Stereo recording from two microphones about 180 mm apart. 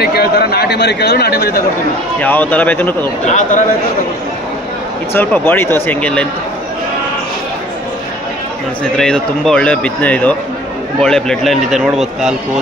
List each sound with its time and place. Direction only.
0.0 s speech: 60° left (ahead or behind)
2.1 s speech: 10° left (ahead or behind)
3.3 s a man's voice: 40° left (ahead or behind)
5.1 s speech: 10° left (ahead or behind)
8.9 s a man's voice: 5° left (ahead or behind)